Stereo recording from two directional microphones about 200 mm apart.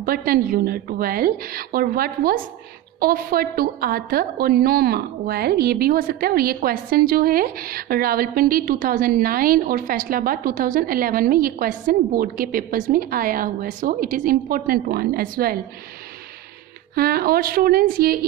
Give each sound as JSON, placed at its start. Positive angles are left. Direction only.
{"t": 0.0, "sound": "a woman's voice", "side_deg": -45}
{"t": 16.9, "sound": "a woman's voice", "side_deg": -50}